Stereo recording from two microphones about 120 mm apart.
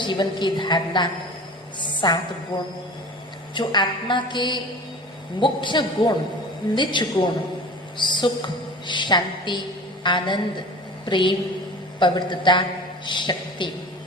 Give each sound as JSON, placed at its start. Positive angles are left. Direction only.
{"t": 0.0, "sound": "a woman's voice", "side_deg": 40}
{"t": 1.8, "sound": "a sound", "side_deg": 40}
{"t": 3.5, "sound": "a woman's voice", "side_deg": 40}